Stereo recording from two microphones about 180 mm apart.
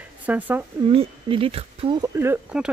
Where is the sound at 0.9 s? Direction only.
30° right (ahead or behind); by 2.7 s 10° right (ahead or behind).